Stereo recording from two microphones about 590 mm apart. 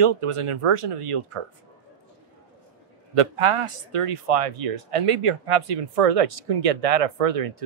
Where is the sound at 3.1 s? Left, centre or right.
Right.